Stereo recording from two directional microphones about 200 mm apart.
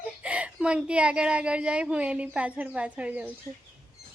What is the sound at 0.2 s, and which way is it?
Speech, 5° right (ahead or behind).